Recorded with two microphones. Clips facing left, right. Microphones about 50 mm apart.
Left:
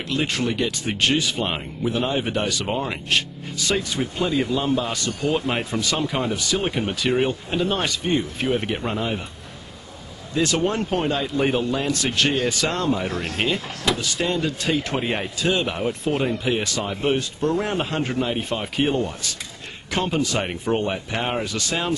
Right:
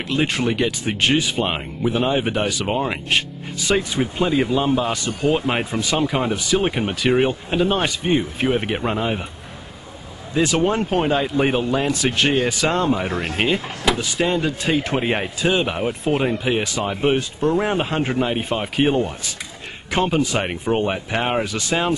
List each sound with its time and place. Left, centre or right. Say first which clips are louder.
0.1 s speech: right 3 dB; centre
10.3 s speech: right 3 dB; centre
20.1 s speech: right 3 dB; centre